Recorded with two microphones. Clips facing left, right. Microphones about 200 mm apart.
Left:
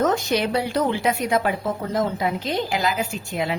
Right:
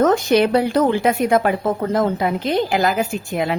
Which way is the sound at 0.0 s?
60° right (ahead or behind).